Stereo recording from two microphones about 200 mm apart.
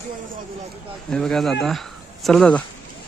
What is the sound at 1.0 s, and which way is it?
Speech, centre (ahead or behind).